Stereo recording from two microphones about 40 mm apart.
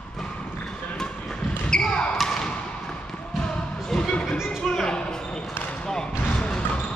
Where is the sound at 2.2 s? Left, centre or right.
Centre.